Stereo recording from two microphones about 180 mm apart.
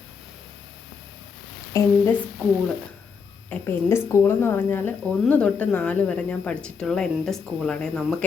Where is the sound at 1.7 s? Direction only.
15° left (ahead or behind).